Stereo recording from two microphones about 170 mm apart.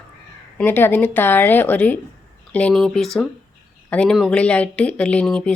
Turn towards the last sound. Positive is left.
turn(degrees=5)  # may be behind; listen again after turning